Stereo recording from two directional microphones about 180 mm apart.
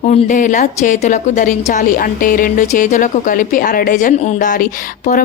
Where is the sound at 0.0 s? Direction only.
40° left (ahead or behind).